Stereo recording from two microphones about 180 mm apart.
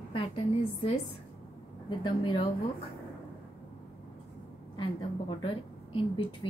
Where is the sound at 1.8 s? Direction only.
25° left (ahead or behind).